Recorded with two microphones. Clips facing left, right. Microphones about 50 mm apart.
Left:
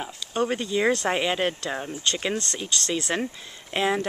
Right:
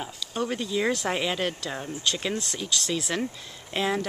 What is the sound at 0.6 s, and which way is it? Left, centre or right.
Speech, centre.